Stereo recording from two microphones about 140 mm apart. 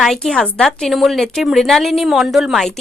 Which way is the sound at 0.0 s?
5° left (ahead or behind).